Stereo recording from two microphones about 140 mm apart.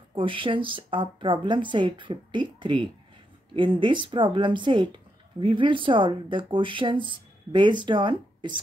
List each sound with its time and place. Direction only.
0.1 s speech: 35° right (ahead or behind)